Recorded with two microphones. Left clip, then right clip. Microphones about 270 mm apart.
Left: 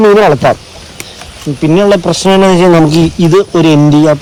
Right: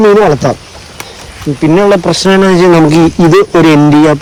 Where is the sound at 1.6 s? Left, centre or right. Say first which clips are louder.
Right 1 dB; centre.